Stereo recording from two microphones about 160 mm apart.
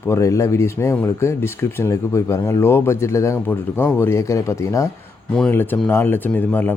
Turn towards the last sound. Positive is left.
turn(degrees=10)  # may be behind; listen again after turning